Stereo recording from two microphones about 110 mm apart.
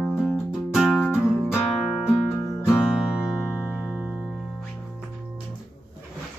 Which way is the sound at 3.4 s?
25° left (ahead or behind).